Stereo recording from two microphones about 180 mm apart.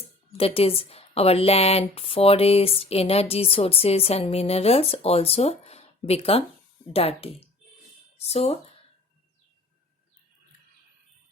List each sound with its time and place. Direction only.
0.3 s speech: 30° left (ahead or behind)